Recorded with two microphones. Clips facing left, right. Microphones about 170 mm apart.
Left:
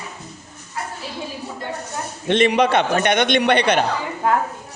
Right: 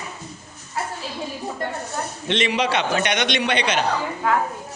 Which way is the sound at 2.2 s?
50° left (ahead or behind).